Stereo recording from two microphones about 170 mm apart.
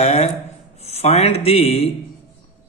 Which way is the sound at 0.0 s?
40° left (ahead or behind).